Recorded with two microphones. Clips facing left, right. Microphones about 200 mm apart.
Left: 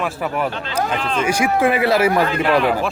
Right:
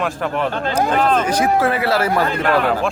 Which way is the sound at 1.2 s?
10° left (ahead or behind).